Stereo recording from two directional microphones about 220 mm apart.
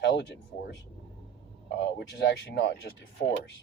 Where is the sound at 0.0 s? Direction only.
50° left (ahead or behind).